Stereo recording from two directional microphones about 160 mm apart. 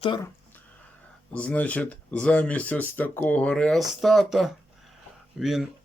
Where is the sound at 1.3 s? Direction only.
10° left (ahead or behind).